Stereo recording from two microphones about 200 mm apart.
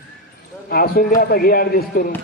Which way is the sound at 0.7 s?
50° left (ahead or behind).